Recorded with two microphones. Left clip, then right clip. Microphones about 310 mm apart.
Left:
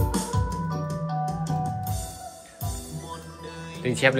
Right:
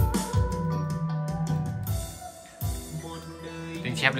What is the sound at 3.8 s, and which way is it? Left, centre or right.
Music, centre.